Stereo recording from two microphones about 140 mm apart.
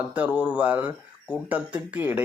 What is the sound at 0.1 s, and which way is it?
Speech, 10° right (ahead or behind).